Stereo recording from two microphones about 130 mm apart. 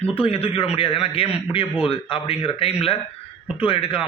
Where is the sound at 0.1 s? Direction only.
45° left (ahead or behind).